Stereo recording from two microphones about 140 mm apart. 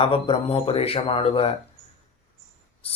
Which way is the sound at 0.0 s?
40° left (ahead or behind).